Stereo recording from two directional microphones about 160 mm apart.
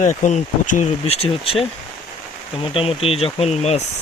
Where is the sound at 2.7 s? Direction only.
35° left (ahead or behind).